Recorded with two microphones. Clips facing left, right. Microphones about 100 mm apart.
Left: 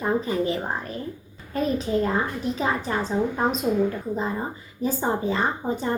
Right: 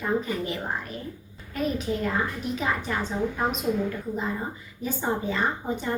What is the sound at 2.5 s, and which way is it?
A woman's voice, 30° left (ahead or behind).